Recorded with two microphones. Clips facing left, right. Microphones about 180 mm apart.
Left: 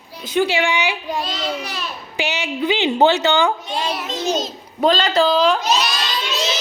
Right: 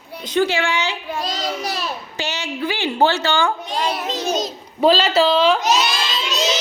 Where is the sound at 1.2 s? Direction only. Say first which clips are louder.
Right 1 dB; 40° right (ahead or behind).